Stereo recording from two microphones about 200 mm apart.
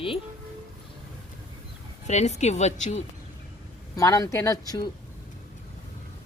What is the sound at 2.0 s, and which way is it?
Speech, 35° left (ahead or behind).